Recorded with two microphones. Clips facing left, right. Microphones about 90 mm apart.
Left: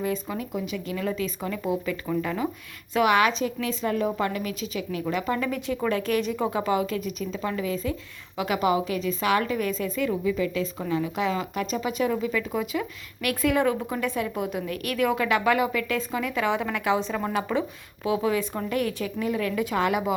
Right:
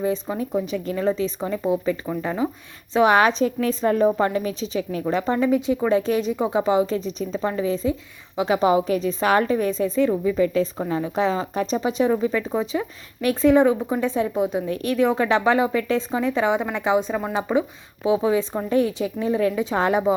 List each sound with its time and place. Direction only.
0.0 s a woman's voice: 25° right (ahead or behind)